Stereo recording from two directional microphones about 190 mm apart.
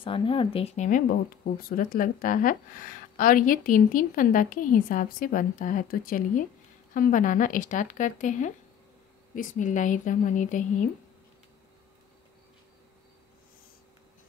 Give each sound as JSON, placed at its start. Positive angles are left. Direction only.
{"t": 0.0, "sound": "speech", "side_deg": 25}